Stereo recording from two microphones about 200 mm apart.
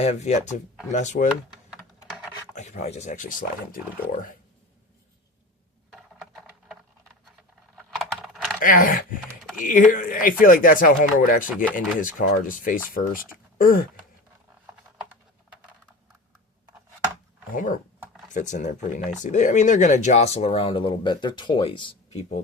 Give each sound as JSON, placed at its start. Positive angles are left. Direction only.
{"t": 0.0, "sound": "speech", "side_deg": 35}
{"t": 2.6, "sound": "speech", "side_deg": 35}
{"t": 5.9, "sound": "a sound", "side_deg": 0}
{"t": 7.8, "sound": "keys jangling", "side_deg": 0}
{"t": 8.6, "sound": "speech", "side_deg": 45}
{"t": 11.4, "sound": "speech", "side_deg": -5}
{"t": 11.7, "sound": "speech", "side_deg": 40}
{"t": 17.5, "sound": "speech", "side_deg": 40}